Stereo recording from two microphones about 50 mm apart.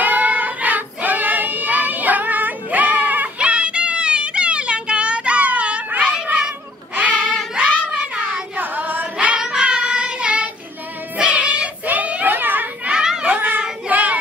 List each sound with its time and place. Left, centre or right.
0.0 s child singing: right
3.3 s music: right
5.9 s cat: right
8.5 s singing: right
9.4 s child singing: centre
11.1 s music: right
12.8 s children playing: centre
13.2 s a sound: right